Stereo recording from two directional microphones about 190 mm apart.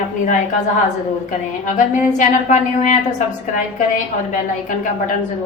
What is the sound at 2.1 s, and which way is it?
A woman's voice, 40° left (ahead or behind).